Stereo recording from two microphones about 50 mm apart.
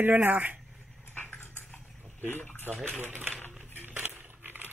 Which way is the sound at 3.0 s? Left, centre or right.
Right.